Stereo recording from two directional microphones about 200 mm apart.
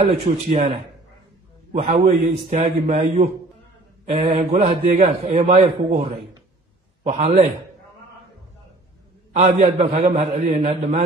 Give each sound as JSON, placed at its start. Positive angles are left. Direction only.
{"t": 0.0, "sound": "a man's voice", "side_deg": -25}
{"t": 7.0, "sound": "a man's voice", "side_deg": -30}
{"t": 9.3, "sound": "a man's voice", "side_deg": -30}
{"t": 10.0, "sound": "a man's voice", "side_deg": -45}
{"t": 10.7, "sound": "a man's voice", "side_deg": -30}